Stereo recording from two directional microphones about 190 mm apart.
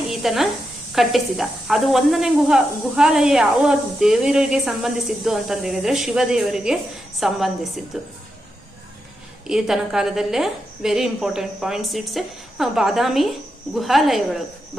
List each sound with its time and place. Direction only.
0.1 s a sound: centre (ahead or behind)
0.9 s speech: centre (ahead or behind)
9.5 s speech: 5° right (ahead or behind)